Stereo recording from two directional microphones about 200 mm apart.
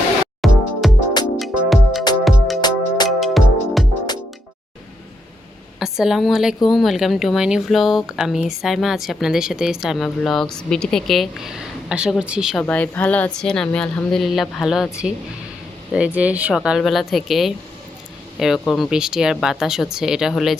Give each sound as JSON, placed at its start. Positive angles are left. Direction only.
{"t": 0.4, "sound": "music", "side_deg": 0}
{"t": 2.6, "sound": "music", "side_deg": 20}
{"t": 3.1, "sound": "music", "side_deg": 0}
{"t": 5.8, "sound": "a woman's voice", "side_deg": 0}
{"t": 12.6, "sound": "speech", "side_deg": 10}